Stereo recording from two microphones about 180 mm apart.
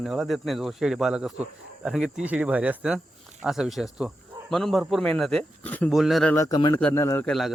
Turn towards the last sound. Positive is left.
turn(degrees=0)  # may be behind; listen again after turning